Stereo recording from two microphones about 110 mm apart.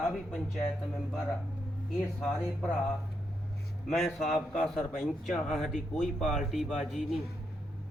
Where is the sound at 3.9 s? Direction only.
Centre (ahead or behind).